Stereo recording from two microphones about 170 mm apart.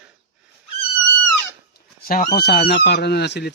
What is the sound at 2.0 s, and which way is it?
Speech, 60° left (ahead or behind).